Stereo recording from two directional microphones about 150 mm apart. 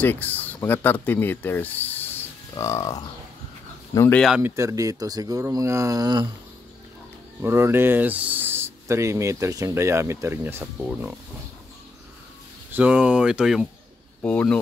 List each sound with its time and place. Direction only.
0.0 s speech: 15° left (ahead or behind)
4.1 s speech: 5° left (ahead or behind)
4.4 s speech: 15° right (ahead or behind)
7.4 s speech: 15° right (ahead or behind)
12.7 s speech: 5° right (ahead or behind)
14.2 s speech: 10° left (ahead or behind)